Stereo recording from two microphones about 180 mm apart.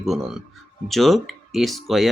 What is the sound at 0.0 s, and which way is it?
Speech, centre (ahead or behind).